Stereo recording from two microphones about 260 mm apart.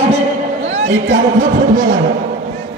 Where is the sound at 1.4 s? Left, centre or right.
Right.